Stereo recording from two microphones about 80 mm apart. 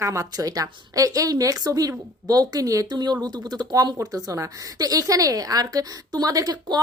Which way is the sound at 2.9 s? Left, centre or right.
Right.